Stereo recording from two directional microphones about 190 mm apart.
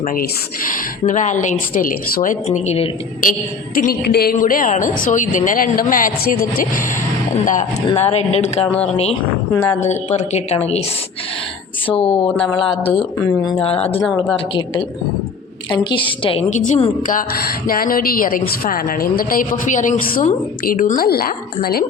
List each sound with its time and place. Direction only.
0.0 s a woman's voice: 45° left (ahead or behind)
3.8 s a woman's voice: 50° left (ahead or behind); by 10.8 s 35° left (ahead or behind)
11.9 s a woman's voice: 30° left (ahead or behind)
12.9 s speech: 10° left (ahead or behind)
13.2 s a woman's voice: 20° left (ahead or behind)
13.6 s a woman's voice: 30° left (ahead or behind); by 21.8 s 55° left (ahead or behind)